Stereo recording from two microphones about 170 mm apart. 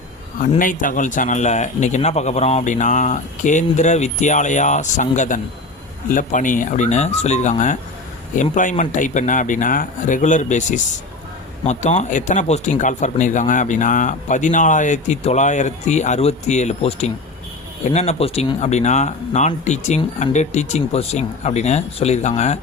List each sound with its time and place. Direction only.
0.6 s speech: 50° left (ahead or behind)